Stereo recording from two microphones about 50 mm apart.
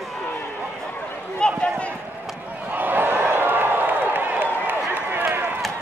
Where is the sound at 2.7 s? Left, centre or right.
Right.